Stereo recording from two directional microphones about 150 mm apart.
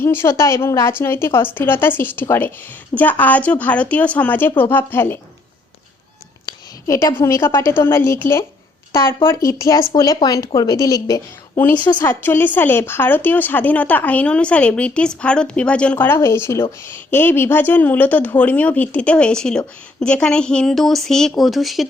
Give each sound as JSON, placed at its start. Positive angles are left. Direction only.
{"t": 0.0, "sound": "a woman's voice", "side_deg": 15}
{"t": 6.4, "sound": "a sound", "side_deg": 25}
{"t": 7.2, "sound": "a woman's voice", "side_deg": 20}